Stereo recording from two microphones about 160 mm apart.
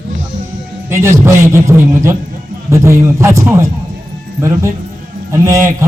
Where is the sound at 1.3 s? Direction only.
15° right (ahead or behind).